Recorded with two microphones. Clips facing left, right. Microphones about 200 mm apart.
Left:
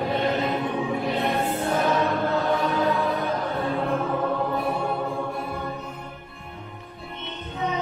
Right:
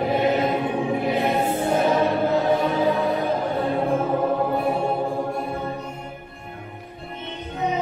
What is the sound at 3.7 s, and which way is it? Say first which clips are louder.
Music: right 4 dB; 25° right (ahead or behind).